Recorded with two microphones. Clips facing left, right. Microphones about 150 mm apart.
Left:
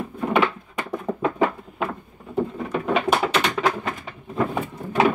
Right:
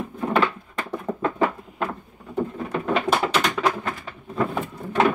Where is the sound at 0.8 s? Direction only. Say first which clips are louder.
Left 1 dB; centre (ahead or behind).